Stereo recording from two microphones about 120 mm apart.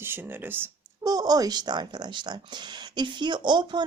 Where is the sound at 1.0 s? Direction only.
35° right (ahead or behind).